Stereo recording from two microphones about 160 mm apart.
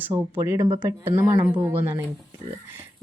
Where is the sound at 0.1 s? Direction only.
20° right (ahead or behind).